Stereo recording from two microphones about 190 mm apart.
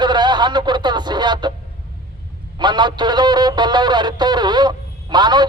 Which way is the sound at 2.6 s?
25° right (ahead or behind).